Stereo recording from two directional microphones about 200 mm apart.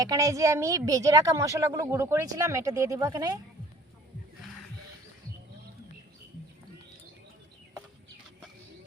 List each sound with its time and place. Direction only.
0.0 s a woman's voice: 15° right (ahead or behind)